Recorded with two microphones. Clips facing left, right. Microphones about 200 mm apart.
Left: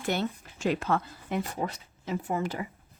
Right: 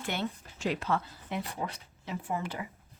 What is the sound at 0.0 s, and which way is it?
Speech, 40° left (ahead or behind).